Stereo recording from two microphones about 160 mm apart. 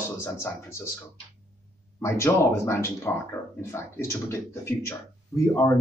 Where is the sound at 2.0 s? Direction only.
15° left (ahead or behind).